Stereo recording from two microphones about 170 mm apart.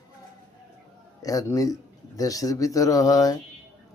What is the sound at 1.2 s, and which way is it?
Speech, 20° left (ahead or behind).